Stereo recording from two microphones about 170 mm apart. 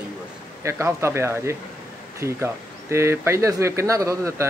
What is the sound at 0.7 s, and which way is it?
A man's voice, 15° right (ahead or behind).